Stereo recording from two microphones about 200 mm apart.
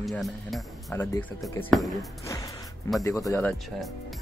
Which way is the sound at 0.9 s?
10° left (ahead or behind).